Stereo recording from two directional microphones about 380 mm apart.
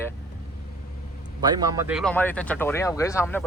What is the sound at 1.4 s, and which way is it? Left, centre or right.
Speech, centre.